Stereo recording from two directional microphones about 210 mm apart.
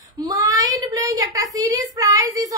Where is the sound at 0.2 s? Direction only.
15° right (ahead or behind).